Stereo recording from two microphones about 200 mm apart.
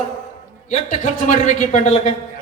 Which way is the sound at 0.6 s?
35° left (ahead or behind).